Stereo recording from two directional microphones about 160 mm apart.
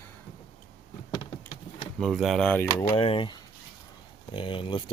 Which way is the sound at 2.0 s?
Centre (ahead or behind).